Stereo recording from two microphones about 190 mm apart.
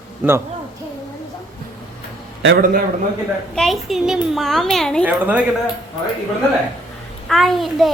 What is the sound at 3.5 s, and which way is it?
A child's voice, centre (ahead or behind).